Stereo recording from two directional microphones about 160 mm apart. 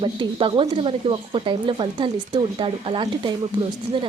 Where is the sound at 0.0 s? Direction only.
30° right (ahead or behind).